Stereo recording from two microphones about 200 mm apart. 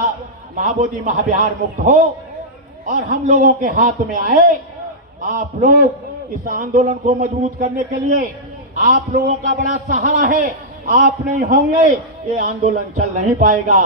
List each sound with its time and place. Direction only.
0.6 s a man's voice: 40° right (ahead or behind)